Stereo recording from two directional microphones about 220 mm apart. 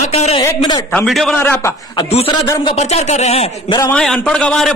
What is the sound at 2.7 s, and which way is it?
Speech, 30° left (ahead or behind).